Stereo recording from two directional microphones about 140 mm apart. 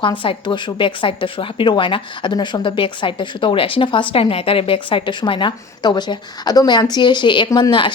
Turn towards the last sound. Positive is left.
turn(degrees=35)  # may be behind; listen again after turning